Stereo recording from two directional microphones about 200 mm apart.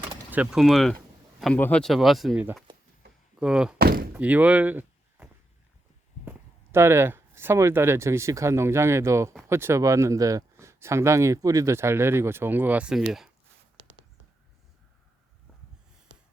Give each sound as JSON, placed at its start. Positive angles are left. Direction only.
{"t": 0.3, "sound": "speech", "side_deg": -5}
{"t": 3.8, "sound": "door", "side_deg": -50}
{"t": 4.2, "sound": "speech", "side_deg": -10}